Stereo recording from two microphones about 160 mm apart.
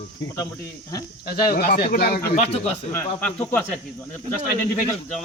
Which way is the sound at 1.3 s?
70° left (ahead or behind).